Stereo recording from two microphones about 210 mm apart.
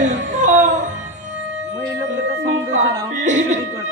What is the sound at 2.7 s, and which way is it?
Music, 35° right (ahead or behind).